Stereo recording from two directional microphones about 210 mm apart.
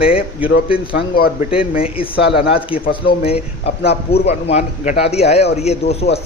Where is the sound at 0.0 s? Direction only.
25° left (ahead or behind).